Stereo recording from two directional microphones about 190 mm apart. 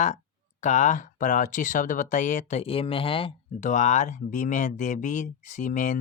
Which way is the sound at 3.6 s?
40° left (ahead or behind).